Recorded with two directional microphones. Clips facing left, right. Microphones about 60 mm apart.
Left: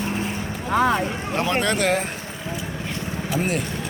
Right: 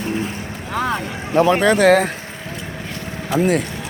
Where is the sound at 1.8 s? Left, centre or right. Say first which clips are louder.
Right 9 dB; right.